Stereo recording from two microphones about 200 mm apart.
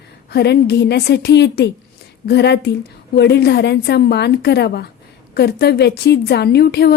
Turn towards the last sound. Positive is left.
turn(degrees=55)  # may be behind; listen again after turning